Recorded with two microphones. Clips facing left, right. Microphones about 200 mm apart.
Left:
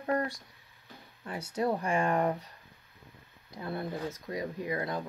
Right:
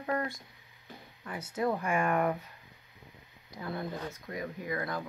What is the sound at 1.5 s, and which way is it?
Speech, 30° left (ahead or behind).